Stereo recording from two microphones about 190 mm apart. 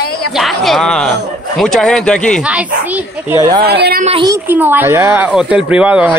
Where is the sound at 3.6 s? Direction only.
55° right (ahead or behind).